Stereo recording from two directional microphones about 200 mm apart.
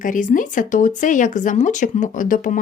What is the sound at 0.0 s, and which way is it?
A woman's voice, 40° left (ahead or behind).